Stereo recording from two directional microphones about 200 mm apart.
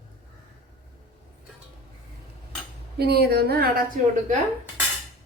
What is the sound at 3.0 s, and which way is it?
A woman's voice, 55° right (ahead or behind).